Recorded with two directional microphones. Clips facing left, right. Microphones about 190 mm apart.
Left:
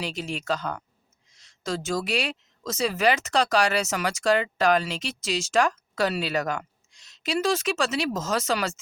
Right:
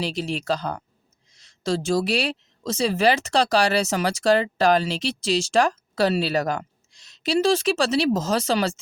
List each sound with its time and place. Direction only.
0.0 s a woman's voice: 35° right (ahead or behind)